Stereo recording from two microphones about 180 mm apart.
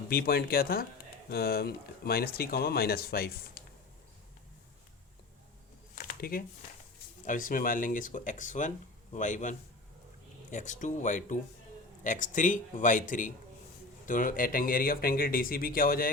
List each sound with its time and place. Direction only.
0.1 s speech: 55° left (ahead or behind)
6.0 s a sound: 50° left (ahead or behind)
7.3 s speech: 50° left (ahead or behind)